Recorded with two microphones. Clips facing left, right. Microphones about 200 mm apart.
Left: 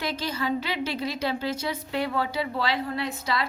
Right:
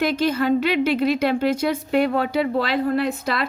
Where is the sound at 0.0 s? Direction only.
55° right (ahead or behind).